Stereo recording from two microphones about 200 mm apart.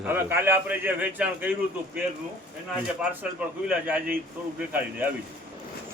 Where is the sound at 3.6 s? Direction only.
5° right (ahead or behind).